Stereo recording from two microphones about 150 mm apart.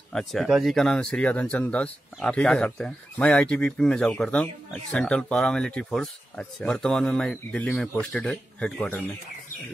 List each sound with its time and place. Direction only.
0.1 s speech: centre (ahead or behind)